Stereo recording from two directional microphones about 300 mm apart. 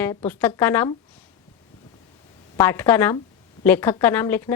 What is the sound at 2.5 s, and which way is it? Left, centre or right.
A woman's voice, centre.